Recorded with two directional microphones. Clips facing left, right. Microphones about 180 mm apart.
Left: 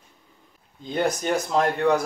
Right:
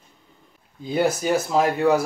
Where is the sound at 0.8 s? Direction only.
5° right (ahead or behind).